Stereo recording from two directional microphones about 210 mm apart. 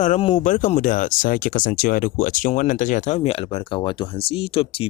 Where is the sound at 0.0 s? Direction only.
35° left (ahead or behind).